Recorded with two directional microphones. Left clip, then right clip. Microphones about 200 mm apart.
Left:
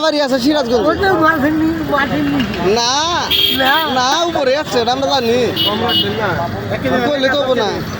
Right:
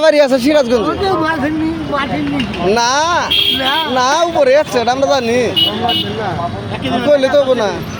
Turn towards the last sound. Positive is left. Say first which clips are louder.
# right 2 dB
turn(degrees=-50)  # may be behind; listen again after turning